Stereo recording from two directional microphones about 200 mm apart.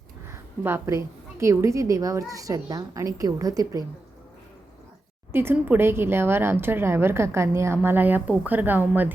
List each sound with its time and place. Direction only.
0.3 s a woman's voice: 10° right (ahead or behind)
5.3 s a woman's voice: 10° right (ahead or behind)